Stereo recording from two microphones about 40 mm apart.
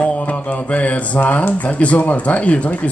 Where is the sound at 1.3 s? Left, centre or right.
Left.